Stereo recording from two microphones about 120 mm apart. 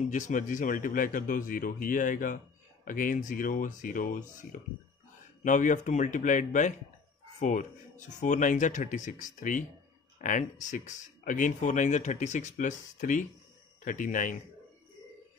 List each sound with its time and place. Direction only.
0.1 s speech: 90° left
7.3 s speech: 80° left
8.1 s speech: 90° left